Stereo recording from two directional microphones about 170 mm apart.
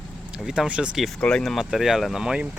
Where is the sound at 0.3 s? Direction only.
5° right (ahead or behind).